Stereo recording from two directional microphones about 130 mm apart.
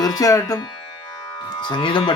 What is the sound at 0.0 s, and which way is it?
Speech, 30° left (ahead or behind).